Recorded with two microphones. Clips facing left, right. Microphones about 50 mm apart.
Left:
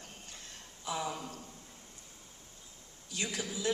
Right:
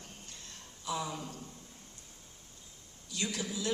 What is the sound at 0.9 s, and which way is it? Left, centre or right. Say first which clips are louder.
Speech: even; left.